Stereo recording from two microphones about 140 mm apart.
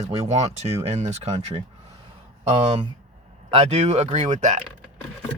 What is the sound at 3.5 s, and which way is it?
Speech, 50° right (ahead or behind).